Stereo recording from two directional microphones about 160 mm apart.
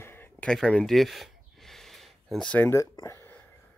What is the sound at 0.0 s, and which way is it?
Gasp, 10° left (ahead or behind).